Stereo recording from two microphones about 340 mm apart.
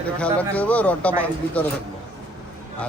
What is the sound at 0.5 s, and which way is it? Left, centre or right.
Speech, centre.